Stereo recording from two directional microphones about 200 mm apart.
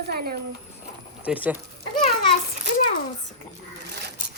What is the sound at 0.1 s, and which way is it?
Speech, 50° right (ahead or behind).